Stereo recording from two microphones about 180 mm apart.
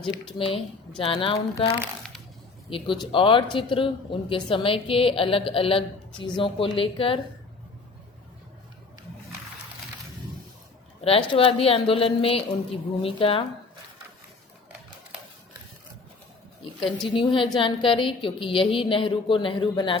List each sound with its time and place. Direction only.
0.3 s a woman's voice: 30° left (ahead or behind)
11.0 s a woman's voice: 30° left (ahead or behind)
17.2 s speech: 30° left (ahead or behind)